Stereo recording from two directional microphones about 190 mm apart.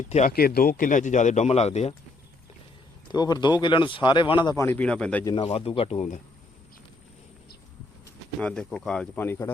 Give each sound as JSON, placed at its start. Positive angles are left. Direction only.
{"t": 0.1, "sound": "speech", "side_deg": 40}
{"t": 0.3, "sound": "speech", "side_deg": 55}
{"t": 3.1, "sound": "speech", "side_deg": 20}
{"t": 5.2, "sound": "speech", "side_deg": 25}
{"t": 8.4, "sound": "speech", "side_deg": 5}